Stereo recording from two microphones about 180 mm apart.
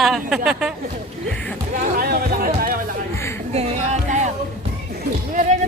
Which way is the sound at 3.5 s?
35° right (ahead or behind).